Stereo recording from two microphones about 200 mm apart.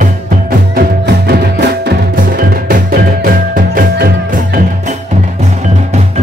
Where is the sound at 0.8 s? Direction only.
55° right (ahead or behind).